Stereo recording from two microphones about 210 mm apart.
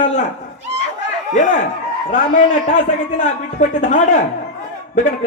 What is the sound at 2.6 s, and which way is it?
Speech, 35° left (ahead or behind).